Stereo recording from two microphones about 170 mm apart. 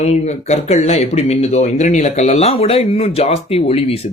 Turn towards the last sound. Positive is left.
turn(degrees=35)  # may be behind; listen again after turning